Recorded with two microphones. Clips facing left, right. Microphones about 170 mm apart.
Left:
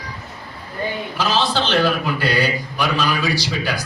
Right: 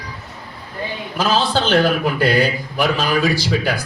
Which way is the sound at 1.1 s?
50° right (ahead or behind).